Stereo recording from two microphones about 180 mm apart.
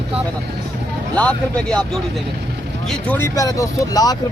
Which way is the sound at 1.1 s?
5° left (ahead or behind).